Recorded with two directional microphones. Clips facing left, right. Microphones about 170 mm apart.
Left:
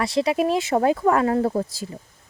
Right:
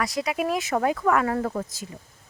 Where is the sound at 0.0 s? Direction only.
30° left (ahead or behind).